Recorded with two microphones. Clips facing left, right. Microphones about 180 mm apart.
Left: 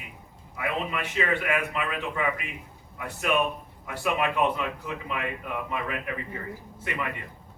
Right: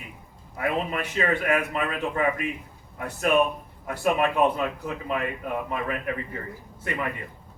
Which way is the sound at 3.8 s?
45° right (ahead or behind).